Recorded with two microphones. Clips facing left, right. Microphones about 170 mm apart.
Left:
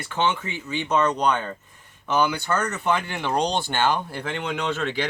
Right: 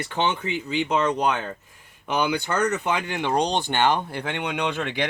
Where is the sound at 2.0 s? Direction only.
15° right (ahead or behind).